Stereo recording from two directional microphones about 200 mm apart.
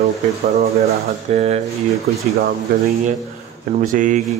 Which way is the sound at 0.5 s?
30° right (ahead or behind).